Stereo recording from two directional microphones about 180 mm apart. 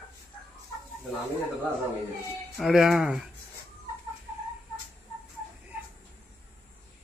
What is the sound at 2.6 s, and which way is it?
Speech, centre (ahead or behind).